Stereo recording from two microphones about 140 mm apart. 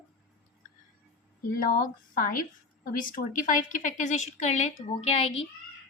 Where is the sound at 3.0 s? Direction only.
75° left (ahead or behind); by 5.5 s 45° left (ahead or behind).